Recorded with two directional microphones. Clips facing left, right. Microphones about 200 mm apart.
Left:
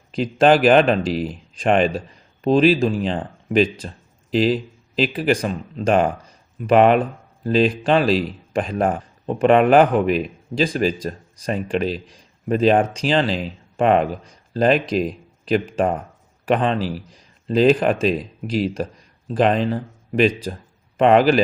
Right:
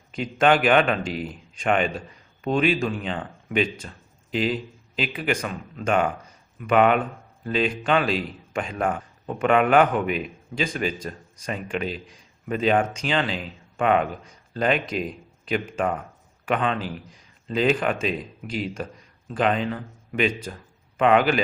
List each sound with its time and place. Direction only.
0.1 s speech: 35° left (ahead or behind)